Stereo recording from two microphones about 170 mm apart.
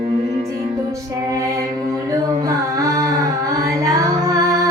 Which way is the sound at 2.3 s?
20° right (ahead or behind).